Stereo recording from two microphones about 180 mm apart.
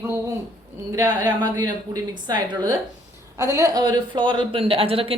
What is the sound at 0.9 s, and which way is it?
Speech, 20° right (ahead or behind).